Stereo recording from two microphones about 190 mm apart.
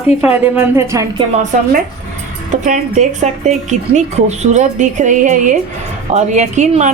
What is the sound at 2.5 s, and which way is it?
Speech, 40° right (ahead or behind).